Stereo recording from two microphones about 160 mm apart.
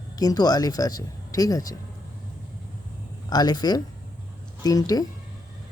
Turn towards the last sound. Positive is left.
turn(degrees=25)  # may be behind; listen again after turning